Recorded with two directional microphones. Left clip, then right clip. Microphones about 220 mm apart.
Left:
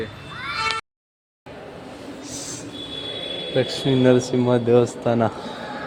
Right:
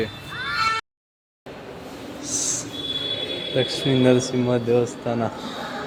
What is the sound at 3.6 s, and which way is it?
Speech, 10° left (ahead or behind).